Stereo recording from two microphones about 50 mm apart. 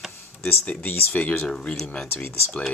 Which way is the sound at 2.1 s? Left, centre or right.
Left.